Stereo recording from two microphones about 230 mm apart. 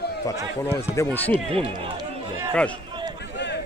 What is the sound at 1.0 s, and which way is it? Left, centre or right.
Speech, centre.